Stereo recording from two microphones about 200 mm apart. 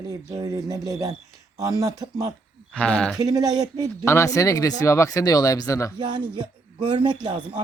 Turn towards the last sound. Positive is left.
turn(degrees=-25)  # may be behind; listen again after turning